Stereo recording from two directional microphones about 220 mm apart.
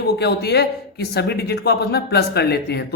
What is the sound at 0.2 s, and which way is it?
Speech, 50° left (ahead or behind).